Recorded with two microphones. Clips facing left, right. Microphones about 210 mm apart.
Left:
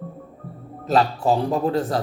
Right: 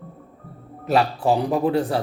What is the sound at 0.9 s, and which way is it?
A man's voice, 15° right (ahead or behind).